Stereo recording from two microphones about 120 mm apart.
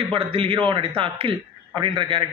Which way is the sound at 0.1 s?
50° right (ahead or behind).